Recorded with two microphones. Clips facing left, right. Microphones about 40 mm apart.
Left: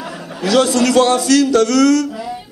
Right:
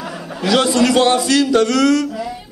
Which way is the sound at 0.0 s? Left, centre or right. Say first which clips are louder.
Even; centre.